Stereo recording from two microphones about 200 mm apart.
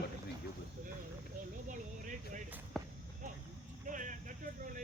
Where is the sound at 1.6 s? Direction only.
40° right (ahead or behind).